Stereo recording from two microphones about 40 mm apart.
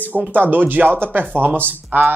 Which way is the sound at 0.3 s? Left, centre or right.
Right.